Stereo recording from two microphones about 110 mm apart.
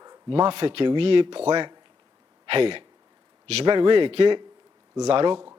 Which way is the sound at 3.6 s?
45° right (ahead or behind).